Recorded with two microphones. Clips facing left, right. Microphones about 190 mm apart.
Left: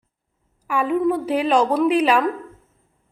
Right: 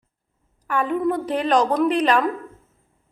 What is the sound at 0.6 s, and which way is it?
A woman's voice, 5° left (ahead or behind).